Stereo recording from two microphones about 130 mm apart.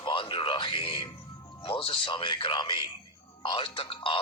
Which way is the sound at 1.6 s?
45° left (ahead or behind).